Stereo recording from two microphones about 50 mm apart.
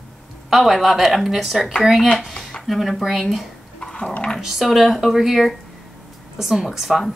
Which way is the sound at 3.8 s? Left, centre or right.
Centre.